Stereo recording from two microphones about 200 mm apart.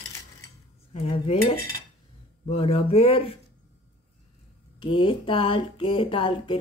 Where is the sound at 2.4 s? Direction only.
30° left (ahead or behind).